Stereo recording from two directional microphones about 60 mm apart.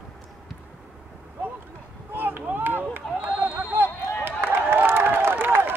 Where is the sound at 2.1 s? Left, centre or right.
Right.